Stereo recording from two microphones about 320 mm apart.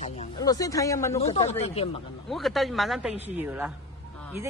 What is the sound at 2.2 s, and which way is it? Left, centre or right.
A man's voice, centre.